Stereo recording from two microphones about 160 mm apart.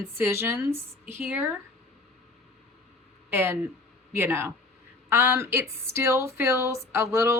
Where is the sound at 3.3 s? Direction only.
15° right (ahead or behind).